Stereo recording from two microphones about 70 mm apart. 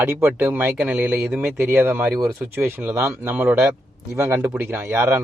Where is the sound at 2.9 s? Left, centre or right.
Right.